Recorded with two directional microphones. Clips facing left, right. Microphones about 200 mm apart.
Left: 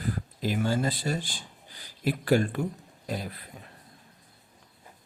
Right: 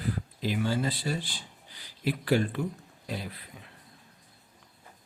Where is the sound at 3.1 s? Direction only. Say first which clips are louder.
Left 3 dB; 45° left (ahead or behind).